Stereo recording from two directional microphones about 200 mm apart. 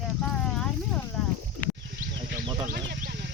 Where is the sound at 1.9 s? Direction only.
50° right (ahead or behind).